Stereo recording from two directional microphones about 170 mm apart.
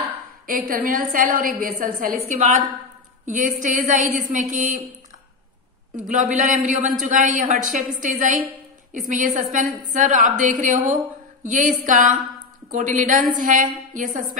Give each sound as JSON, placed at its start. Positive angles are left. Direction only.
{"t": 0.5, "sound": "a woman's voice", "side_deg": -55}
{"t": 5.9, "sound": "a woman's voice", "side_deg": -50}